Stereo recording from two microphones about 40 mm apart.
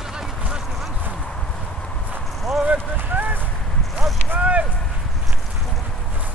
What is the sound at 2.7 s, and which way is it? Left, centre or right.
Run, right.